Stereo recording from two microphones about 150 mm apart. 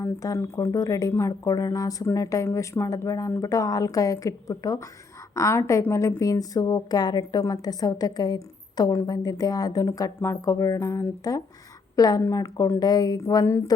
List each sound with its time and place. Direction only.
0.0 s a woman's voice: 20° left (ahead or behind)